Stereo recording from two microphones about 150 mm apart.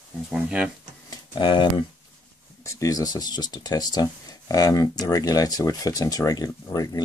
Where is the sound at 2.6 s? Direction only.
20° left (ahead or behind).